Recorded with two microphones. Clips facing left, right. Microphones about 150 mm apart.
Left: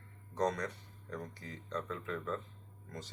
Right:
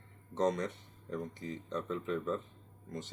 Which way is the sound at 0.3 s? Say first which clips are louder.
Right 3 dB; 25° right (ahead or behind).